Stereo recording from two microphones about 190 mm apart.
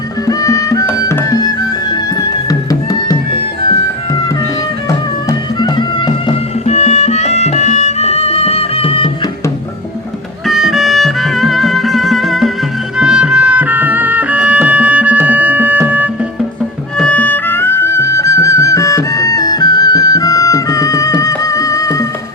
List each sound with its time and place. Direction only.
0.3 s music: 20° left (ahead or behind)
5.5 s music: 25° left (ahead or behind)
10.4 s music: centre (ahead or behind)
17.0 s music: 5° left (ahead or behind)